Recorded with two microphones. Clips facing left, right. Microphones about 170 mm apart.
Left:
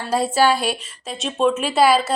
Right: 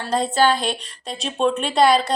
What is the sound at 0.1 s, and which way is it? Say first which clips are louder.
Speech: left 1 dB; 10° left (ahead or behind).